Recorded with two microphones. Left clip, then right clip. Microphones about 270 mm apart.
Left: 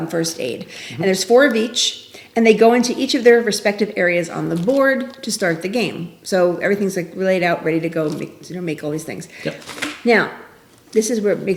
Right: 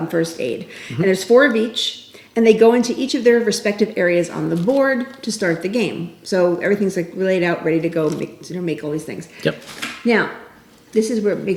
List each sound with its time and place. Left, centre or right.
0.3 s a woman's voice: centre